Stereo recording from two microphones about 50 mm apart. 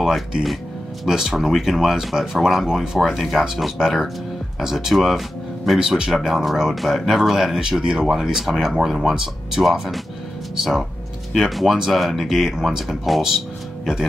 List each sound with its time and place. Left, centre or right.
0.0 s speech: centre
5.8 s speech: centre
7.8 s speech: centre
8.1 s speech: centre